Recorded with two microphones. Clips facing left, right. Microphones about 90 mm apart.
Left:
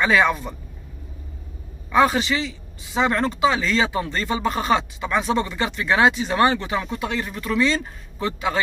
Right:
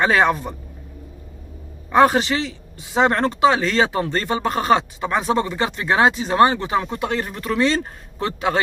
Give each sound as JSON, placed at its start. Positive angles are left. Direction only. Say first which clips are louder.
{"t": 0.0, "sound": "a man's voice", "louder": "right 2 dB", "side_deg": -45}
{"t": 1.9, "sound": "a man's voice", "louder": "right 3 dB", "side_deg": -50}
{"t": 7.0, "sound": "a man's voice", "louder": "right 3 dB", "side_deg": -50}